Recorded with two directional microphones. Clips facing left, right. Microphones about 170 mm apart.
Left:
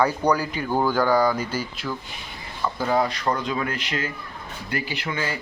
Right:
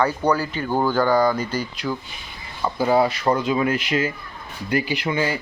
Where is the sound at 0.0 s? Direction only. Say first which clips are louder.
Right 1 dB; 10° left (ahead or behind).